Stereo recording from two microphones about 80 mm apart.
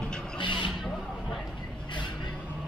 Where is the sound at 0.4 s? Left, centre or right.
Left.